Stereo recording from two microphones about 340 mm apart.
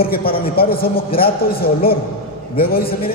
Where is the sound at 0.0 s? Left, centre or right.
Left.